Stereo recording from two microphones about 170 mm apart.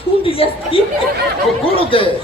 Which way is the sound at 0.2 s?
35° left (ahead or behind).